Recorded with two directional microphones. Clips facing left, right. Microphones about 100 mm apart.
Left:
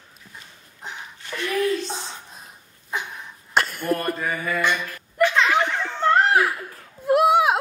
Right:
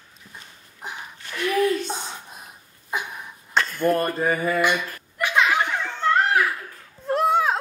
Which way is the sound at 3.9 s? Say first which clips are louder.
Right 3 dB; 25° right (ahead or behind).